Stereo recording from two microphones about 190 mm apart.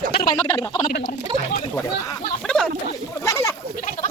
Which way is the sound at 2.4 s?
5° left (ahead or behind).